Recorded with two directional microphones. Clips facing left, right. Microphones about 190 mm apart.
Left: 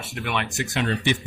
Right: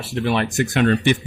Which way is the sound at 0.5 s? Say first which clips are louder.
Right 8 dB; 55° right (ahead or behind).